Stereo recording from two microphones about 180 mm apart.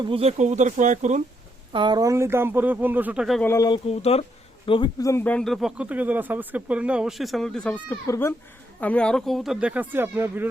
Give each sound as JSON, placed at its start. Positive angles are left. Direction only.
{"t": 0.0, "sound": "speech", "side_deg": -30}
{"t": 1.7, "sound": "speech", "side_deg": -25}
{"t": 3.4, "sound": "speech", "side_deg": 20}
{"t": 3.8, "sound": "speech", "side_deg": 35}
{"t": 8.0, "sound": "speech", "side_deg": 15}
{"t": 8.8, "sound": "speech", "side_deg": 5}